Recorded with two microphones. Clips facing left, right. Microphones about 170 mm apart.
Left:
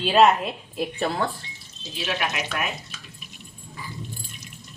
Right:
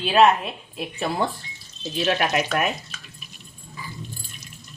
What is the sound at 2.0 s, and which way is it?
Speech, 50° right (ahead or behind).